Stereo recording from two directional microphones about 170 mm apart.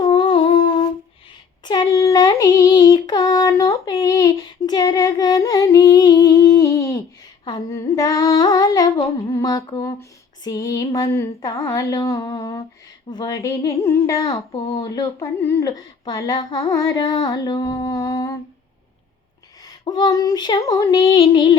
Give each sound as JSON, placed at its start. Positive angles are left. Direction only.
{"t": 0.0, "sound": "humming", "side_deg": 25}
{"t": 1.6, "sound": "a sound", "side_deg": 25}
{"t": 7.4, "sound": "humming", "side_deg": 20}
{"t": 19.6, "sound": "humming", "side_deg": 25}